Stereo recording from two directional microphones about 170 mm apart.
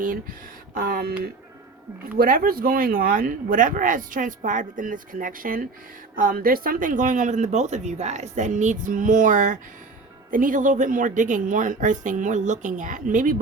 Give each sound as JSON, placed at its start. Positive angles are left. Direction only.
{"t": 0.7, "sound": "speech", "side_deg": -60}
{"t": 2.1, "sound": "speech", "side_deg": -55}